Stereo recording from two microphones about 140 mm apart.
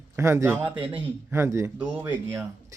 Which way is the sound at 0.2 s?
20° right (ahead or behind).